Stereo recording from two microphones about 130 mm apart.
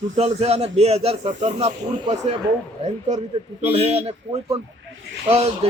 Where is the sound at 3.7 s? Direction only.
55° right (ahead or behind).